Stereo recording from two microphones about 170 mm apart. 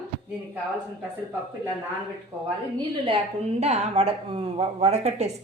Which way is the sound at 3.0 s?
35° right (ahead or behind).